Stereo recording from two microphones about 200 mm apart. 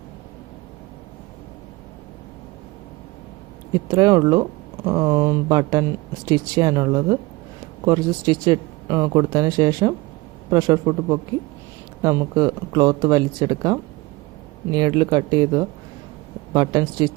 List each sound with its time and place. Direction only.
3.8 s speech: 20° right (ahead or behind)